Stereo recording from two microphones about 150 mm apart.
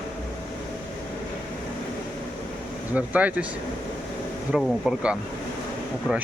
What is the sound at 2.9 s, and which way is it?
Speech, 10° right (ahead or behind).